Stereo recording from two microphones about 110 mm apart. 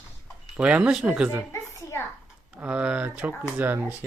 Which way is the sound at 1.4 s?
25° left (ahead or behind).